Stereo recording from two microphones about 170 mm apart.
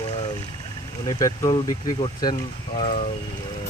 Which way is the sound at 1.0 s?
25° left (ahead or behind).